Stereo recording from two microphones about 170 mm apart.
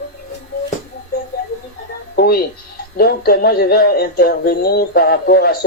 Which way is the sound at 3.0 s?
65° left (ahead or behind).